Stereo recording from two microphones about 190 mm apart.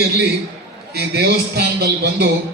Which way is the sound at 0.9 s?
60° right (ahead or behind).